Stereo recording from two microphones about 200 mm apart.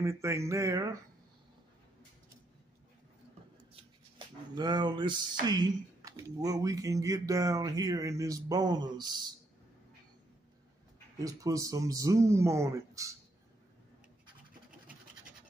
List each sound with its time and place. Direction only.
0.0 s speech: 15° right (ahead or behind)
4.6 s speech: 20° right (ahead or behind)
11.1 s speech: 15° right (ahead or behind)